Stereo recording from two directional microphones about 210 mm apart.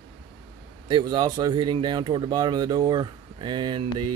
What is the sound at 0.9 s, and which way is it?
Speech, 20° right (ahead or behind).